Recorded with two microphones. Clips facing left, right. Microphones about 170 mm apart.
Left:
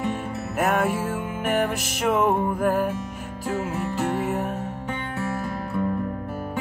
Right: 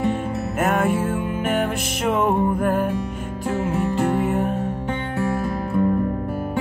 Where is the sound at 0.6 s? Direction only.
Centre (ahead or behind).